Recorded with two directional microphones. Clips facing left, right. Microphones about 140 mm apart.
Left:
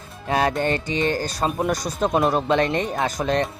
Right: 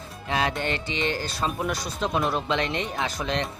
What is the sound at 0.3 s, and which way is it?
Speech, 45° left (ahead or behind).